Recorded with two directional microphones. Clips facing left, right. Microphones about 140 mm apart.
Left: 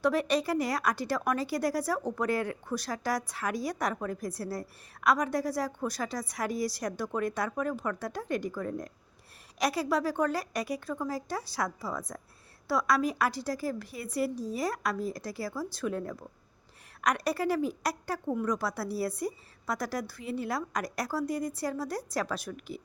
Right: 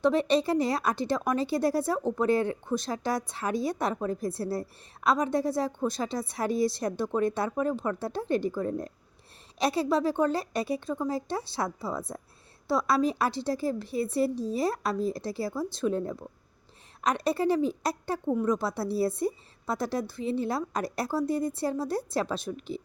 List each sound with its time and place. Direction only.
0.0 s speech: 25° right (ahead or behind)